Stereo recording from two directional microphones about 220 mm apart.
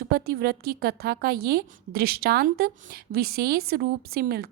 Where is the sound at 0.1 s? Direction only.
45° right (ahead or behind).